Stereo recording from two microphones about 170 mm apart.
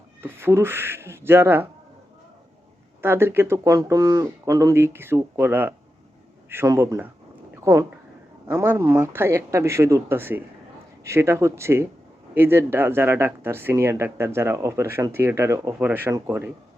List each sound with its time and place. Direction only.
0.2 s speech: 15° right (ahead or behind)
3.0 s speech: 15° right (ahead or behind)